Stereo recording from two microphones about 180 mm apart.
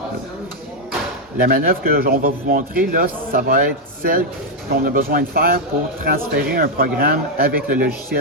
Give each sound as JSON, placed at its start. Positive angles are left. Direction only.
{"t": 1.4, "sound": "a man's voice", "side_deg": -50}